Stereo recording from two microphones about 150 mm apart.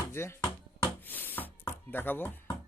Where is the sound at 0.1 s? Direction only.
15° left (ahead or behind).